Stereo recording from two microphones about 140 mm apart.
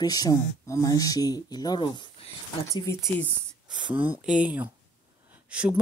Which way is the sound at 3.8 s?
15° right (ahead or behind).